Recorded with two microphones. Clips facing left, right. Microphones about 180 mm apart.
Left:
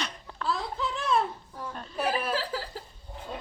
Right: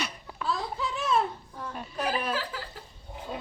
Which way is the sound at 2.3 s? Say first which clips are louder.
Left 2 dB; 30° left (ahead or behind).